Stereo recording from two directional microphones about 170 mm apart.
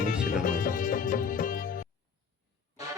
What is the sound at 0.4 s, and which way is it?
Music, 55° left (ahead or behind).